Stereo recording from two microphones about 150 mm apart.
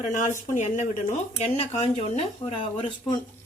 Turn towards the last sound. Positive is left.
turn(degrees=35)  # may be behind; listen again after turning